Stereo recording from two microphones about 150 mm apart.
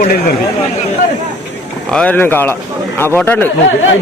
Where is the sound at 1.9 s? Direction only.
5° left (ahead or behind).